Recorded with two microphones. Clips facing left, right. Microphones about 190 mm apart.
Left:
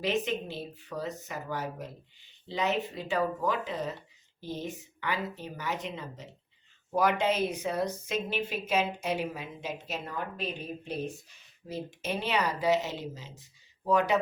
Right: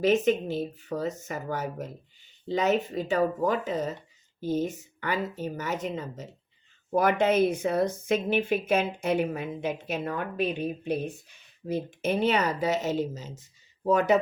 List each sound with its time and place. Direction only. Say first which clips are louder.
0.0 s speech: right 7 dB; 45° right (ahead or behind)